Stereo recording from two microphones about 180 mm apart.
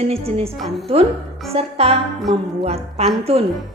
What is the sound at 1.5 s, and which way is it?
Speech, 35° right (ahead or behind).